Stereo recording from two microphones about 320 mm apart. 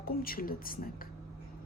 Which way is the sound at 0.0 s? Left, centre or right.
Left.